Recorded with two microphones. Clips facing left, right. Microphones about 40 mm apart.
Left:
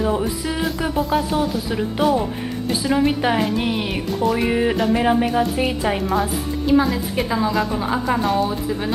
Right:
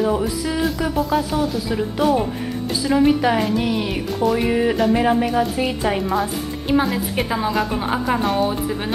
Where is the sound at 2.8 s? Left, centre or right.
Centre.